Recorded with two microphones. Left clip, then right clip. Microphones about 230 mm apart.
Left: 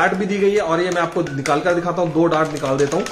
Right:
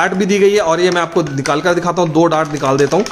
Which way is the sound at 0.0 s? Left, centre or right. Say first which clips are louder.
Right 5 dB; right.